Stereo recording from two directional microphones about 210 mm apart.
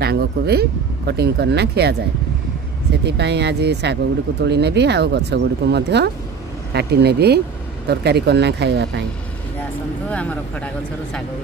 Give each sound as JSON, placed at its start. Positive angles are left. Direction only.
{"t": 0.0, "sound": "speech", "side_deg": -50}
{"t": 3.1, "sound": "speech", "side_deg": -55}
{"t": 10.0, "sound": "speech", "side_deg": 5}